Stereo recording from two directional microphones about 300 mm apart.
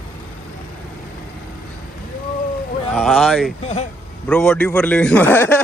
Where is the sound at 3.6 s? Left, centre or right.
Left.